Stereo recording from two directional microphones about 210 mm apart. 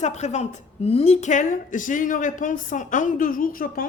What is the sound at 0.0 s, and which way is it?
A woman's voice, 35° left (ahead or behind).